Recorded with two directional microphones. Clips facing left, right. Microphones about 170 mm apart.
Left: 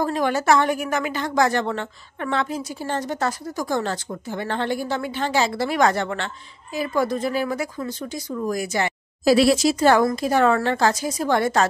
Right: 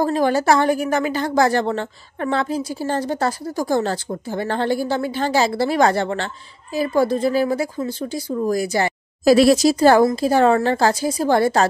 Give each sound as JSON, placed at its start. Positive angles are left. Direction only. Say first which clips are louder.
{"t": 0.0, "sound": "a woman's voice", "louder": "right 4 dB", "side_deg": -35}